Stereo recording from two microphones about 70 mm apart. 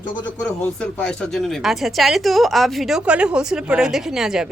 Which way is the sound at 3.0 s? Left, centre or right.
Centre.